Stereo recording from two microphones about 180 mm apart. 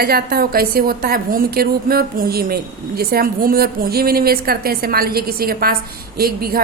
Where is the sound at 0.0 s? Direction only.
55° right (ahead or behind).